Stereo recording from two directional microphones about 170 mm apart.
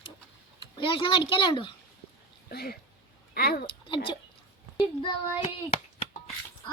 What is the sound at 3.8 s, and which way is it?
Speech, 30° left (ahead or behind).